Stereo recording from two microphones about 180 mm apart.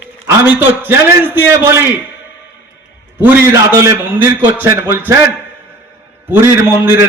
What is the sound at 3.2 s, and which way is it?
A man's voice, 15° right (ahead or behind).